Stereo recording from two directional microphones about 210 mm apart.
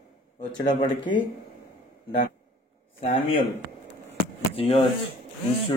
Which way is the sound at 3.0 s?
30° left (ahead or behind).